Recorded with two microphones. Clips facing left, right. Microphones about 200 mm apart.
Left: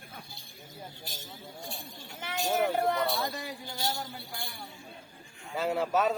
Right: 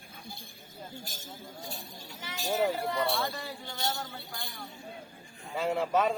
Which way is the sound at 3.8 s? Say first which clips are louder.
Even; 20° left (ahead or behind).